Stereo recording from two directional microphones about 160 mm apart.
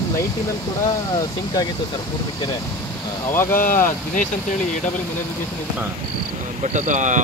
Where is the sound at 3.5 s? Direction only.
60° left (ahead or behind).